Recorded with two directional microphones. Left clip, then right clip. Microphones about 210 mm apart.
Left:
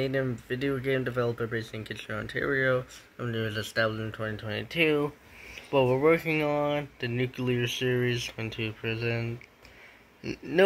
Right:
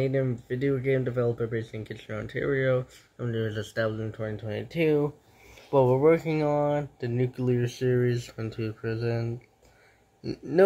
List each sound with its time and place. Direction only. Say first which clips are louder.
0.0 s speech: right 2 dB; 5° right (ahead or behind)
7.8 s speech: right 2 dB; 45° right (ahead or behind)
8.8 s speech: right 1 dB; centre (ahead or behind)